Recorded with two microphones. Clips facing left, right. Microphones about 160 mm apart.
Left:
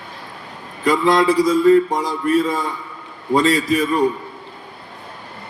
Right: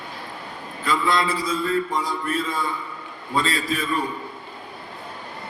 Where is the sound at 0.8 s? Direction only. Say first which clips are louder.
Left 7 dB; 45° left (ahead or behind).